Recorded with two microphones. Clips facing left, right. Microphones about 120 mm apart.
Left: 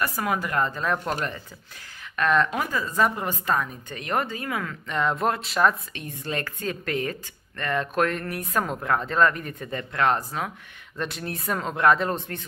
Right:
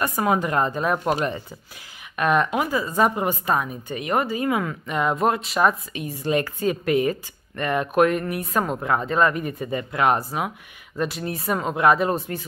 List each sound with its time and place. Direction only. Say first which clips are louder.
0.0 s a woman's voice: right 5 dB; 25° right (ahead or behind); by 4.4 s 5° right (ahead or behind)
4.4 s a woman's voice: right 7 dB; 20° right (ahead or behind)
11.0 s speech: right 5 dB; 5° right (ahead or behind)